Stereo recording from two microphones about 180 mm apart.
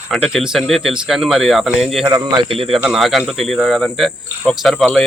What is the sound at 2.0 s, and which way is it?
Speech, 25° right (ahead or behind).